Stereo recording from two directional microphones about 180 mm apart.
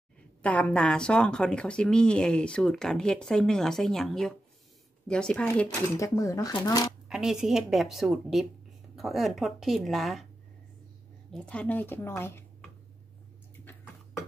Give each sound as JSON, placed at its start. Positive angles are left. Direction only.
{"t": 0.4, "sound": "speech", "side_deg": 5}
{"t": 7.1, "sound": "speech", "side_deg": -5}
{"t": 11.3, "sound": "a woman's voice", "side_deg": 5}